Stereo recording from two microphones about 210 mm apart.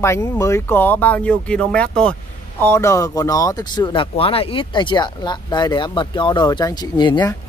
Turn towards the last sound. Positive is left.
turn(degrees=20)  # may be behind; listen again after turning